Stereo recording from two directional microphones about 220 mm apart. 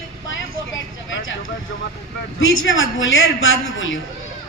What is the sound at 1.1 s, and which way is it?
A woman's voice, 60° left (ahead or behind).